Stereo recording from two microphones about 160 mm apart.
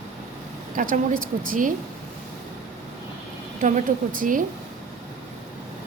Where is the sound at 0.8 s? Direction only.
60° right (ahead or behind).